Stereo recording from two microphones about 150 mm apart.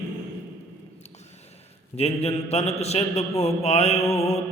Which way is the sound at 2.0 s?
45° left (ahead or behind).